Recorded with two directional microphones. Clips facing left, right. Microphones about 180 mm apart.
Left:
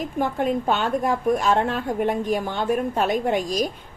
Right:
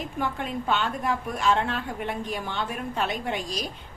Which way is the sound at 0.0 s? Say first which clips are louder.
Left 7 dB; 45° left (ahead or behind).